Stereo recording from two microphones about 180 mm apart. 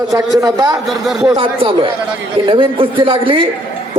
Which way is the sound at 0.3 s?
20° right (ahead or behind).